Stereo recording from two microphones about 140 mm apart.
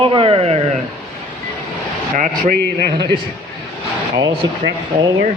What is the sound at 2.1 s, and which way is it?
Speech, 80° right.